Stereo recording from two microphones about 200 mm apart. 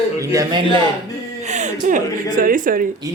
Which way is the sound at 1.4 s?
35° right (ahead or behind).